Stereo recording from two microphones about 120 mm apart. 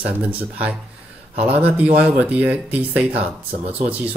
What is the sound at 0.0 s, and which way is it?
Speech, 10° right (ahead or behind).